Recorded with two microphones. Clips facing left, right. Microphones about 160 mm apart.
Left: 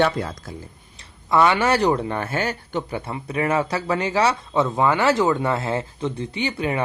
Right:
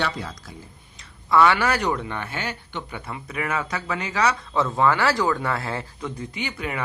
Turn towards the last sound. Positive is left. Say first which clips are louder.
# left 6 dB
turn(degrees=30)  # may be behind; listen again after turning